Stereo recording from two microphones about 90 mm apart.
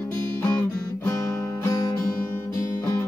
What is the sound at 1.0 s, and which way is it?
Guitar, 35° left (ahead or behind).